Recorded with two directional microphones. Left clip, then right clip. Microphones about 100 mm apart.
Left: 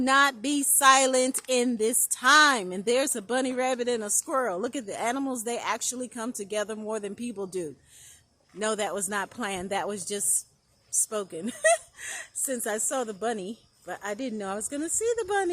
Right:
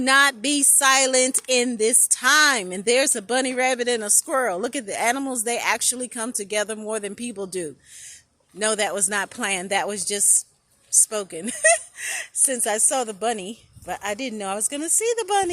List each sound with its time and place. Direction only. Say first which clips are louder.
0.0 s speech: right 5 dB; 10° right (ahead or behind)